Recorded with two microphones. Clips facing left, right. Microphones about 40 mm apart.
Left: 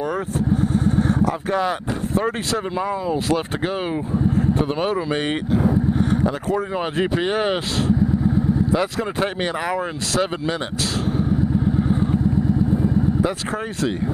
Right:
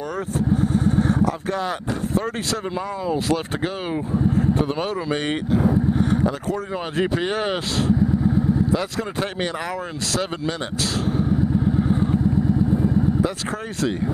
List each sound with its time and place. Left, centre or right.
1.2 s speech: centre
8.7 s speech: centre
13.2 s speech: centre